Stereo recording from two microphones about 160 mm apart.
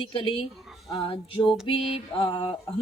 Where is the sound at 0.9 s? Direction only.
35° left (ahead or behind).